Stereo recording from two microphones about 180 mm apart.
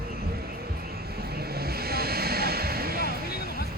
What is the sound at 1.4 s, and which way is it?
Vehicle, 60° right (ahead or behind).